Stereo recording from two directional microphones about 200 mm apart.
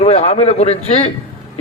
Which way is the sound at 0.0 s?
30° left (ahead or behind).